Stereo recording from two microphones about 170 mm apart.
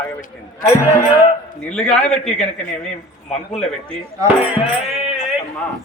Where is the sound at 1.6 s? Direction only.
5° left (ahead or behind).